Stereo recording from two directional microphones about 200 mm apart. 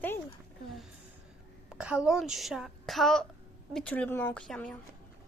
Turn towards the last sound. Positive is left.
turn(degrees=5)  # may be behind; listen again after turning